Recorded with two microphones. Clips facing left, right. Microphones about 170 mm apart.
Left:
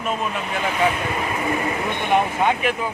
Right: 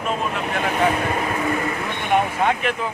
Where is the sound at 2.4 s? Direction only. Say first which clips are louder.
Left 1 dB; centre (ahead or behind).